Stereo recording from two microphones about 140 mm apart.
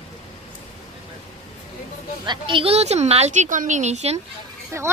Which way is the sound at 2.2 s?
35° right (ahead or behind).